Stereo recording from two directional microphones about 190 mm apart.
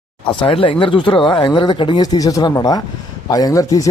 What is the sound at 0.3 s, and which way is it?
A man's voice, 25° left (ahead or behind).